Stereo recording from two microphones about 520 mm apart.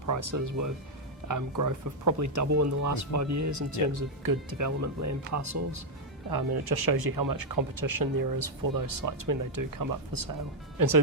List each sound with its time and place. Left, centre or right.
0.0 s speech: right
6.3 s speech: right